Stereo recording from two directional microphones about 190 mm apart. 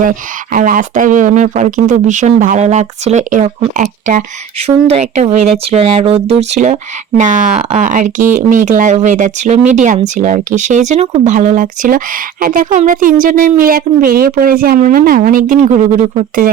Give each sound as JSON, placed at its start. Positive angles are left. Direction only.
{"t": 0.0, "sound": "speech", "side_deg": -45}